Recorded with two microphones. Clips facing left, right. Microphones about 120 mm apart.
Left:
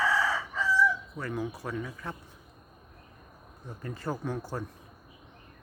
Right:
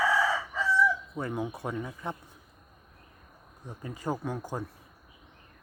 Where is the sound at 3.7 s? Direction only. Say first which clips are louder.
Right 1 dB; 15° right (ahead or behind).